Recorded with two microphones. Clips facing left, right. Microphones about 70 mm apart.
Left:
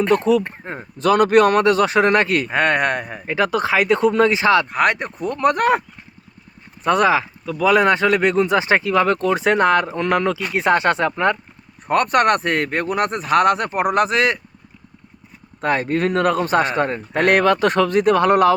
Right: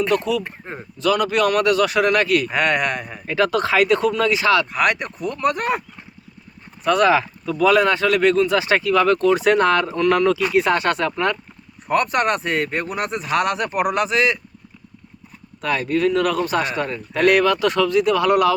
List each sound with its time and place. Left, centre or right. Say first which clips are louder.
0.0 s a man's voice: left 4 dB; left
3.2 s speech: even; centre
5.4 s speech: left 5 dB; left
6.8 s speech: left 1 dB; left
7.1 s speech: right 1 dB; centre
7.6 s speech: left 1 dB; left
11.9 s speech: left 3 dB; left
13.7 s speech: left 2 dB; left
14.0 s speech: left 2 dB; left
15.6 s a man's voice: left 1 dB; left